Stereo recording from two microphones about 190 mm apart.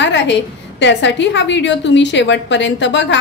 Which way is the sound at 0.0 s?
70° left (ahead or behind).